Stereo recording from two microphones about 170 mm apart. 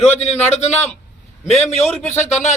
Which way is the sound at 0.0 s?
40° left (ahead or behind).